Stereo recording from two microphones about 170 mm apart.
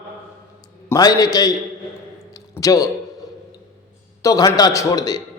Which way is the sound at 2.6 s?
20° left (ahead or behind).